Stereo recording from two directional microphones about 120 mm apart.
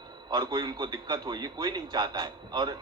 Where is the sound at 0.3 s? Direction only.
35° right (ahead or behind).